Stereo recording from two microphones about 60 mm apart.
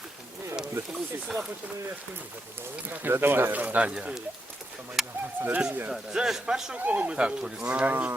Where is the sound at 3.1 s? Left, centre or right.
Right.